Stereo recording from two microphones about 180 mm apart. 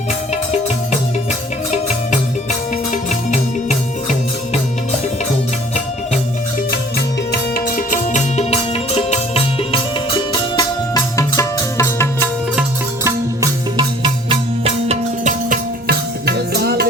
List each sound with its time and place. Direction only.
2.9 s music: 45° left (ahead or behind)
7.3 s music: 55° left (ahead or behind); by 9.8 s 35° left (ahead or behind)
10.5 s music: 20° left (ahead or behind)
13.1 s music: 20° right (ahead or behind); by 16.8 s 65° right (ahead or behind)